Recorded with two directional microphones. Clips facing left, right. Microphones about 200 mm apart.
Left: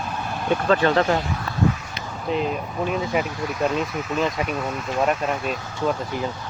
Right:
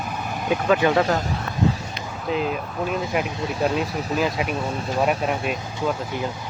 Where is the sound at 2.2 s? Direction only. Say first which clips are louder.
Even; centre (ahead or behind).